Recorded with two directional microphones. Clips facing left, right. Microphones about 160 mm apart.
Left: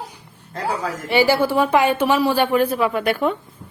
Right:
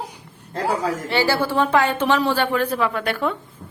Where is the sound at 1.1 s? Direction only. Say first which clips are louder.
Left 5 dB; 15° left (ahead or behind).